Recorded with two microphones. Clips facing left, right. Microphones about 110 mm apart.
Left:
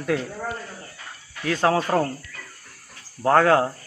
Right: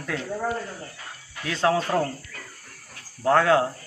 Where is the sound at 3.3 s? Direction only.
40° left (ahead or behind).